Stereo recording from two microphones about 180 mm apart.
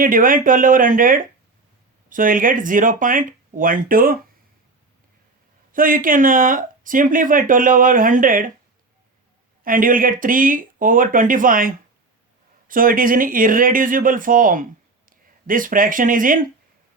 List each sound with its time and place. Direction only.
0.0 s speech: 50° right (ahead or behind)
5.7 s speech: 50° right (ahead or behind)
9.6 s speech: 50° right (ahead or behind)